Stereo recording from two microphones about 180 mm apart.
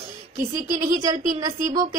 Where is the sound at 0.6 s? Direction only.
20° right (ahead or behind).